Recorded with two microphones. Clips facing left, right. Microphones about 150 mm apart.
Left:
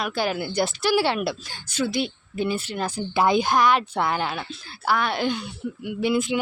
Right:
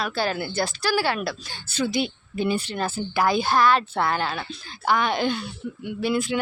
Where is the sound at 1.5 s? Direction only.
10° left (ahead or behind).